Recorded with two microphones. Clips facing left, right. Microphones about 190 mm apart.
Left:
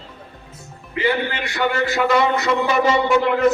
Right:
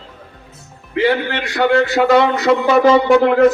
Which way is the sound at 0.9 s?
75° right (ahead or behind).